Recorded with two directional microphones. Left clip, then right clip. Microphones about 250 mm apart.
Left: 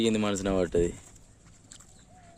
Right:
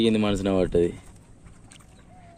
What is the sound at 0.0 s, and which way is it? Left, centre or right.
Speech, centre.